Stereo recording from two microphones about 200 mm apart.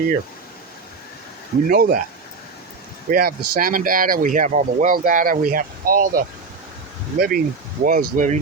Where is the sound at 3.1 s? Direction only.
50° right (ahead or behind).